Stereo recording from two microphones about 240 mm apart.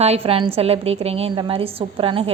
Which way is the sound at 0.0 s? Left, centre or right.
Right.